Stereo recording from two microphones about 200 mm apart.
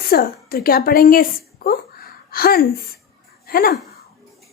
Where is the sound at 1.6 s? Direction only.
50° left (ahead or behind).